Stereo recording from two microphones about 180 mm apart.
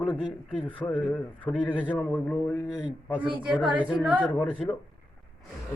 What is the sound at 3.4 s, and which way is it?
Speech, 10° right (ahead or behind).